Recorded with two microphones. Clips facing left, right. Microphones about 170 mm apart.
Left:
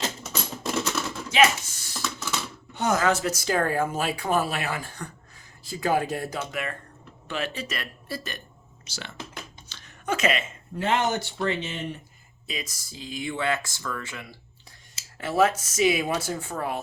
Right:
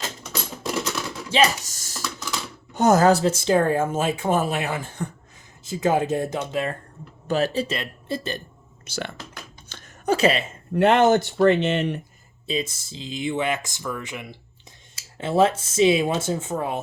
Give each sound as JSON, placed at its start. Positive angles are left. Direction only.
{"t": 0.9, "sound": "a sound", "side_deg": 5}
{"t": 1.3, "sound": "speech", "side_deg": -35}
{"t": 8.8, "sound": "speech", "side_deg": -55}
{"t": 9.6, "sound": "a sound", "side_deg": -50}
{"t": 10.1, "sound": "speech", "side_deg": -35}
{"t": 10.8, "sound": "speech", "side_deg": -65}
{"t": 12.5, "sound": "speech", "side_deg": -25}